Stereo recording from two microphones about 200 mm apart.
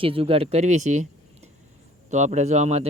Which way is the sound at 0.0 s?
30° right (ahead or behind).